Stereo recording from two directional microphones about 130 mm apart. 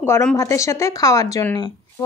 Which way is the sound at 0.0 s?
20° left (ahead or behind).